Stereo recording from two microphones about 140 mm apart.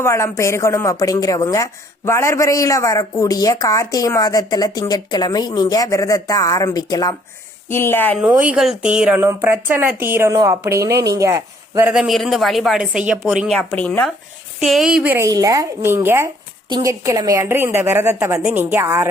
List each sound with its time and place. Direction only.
0.0 s a woman's voice: 20° left (ahead or behind)
8.2 s speech: 10° right (ahead or behind)
11.9 s speech: centre (ahead or behind)
14.6 s speech: centre (ahead or behind)
15.3 s a woman's voice: 25° right (ahead or behind)